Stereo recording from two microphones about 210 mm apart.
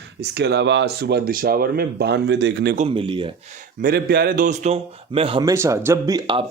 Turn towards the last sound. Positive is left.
turn(degrees=-25)  # may be behind; listen again after turning